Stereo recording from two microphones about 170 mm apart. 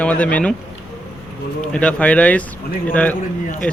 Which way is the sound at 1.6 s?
5° left (ahead or behind).